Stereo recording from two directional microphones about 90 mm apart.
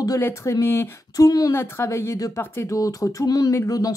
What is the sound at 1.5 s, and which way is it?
Speech, 30° left (ahead or behind).